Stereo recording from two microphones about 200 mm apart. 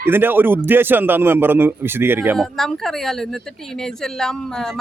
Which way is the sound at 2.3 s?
Centre (ahead or behind).